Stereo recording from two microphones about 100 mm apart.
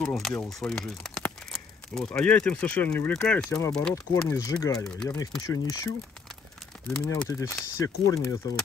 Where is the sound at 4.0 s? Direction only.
35° left (ahead or behind).